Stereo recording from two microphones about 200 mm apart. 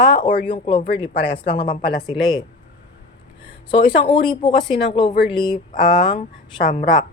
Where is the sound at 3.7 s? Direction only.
25° left (ahead or behind).